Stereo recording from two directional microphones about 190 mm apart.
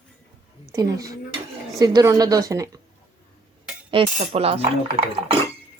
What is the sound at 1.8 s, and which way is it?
A woman's voice, 20° right (ahead or behind).